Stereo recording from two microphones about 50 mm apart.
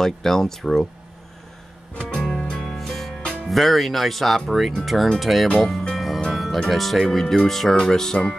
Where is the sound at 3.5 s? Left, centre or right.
Centre.